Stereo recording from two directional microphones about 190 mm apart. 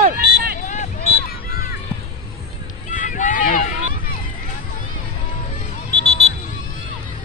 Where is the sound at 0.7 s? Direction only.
40° left (ahead or behind).